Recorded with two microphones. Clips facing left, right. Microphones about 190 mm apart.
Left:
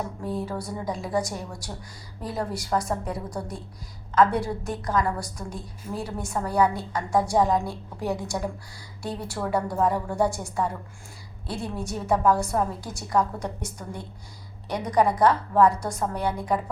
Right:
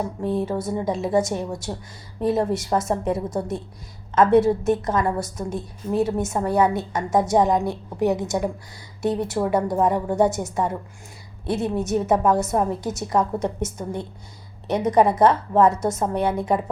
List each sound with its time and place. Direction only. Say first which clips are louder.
0.2 s a woman's voice: right 6 dB; 25° right (ahead or behind)